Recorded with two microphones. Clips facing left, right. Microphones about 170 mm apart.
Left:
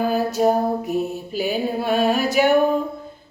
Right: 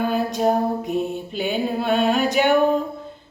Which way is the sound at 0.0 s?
5° left (ahead or behind).